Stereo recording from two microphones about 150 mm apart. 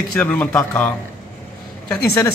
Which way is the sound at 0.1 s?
10° left (ahead or behind).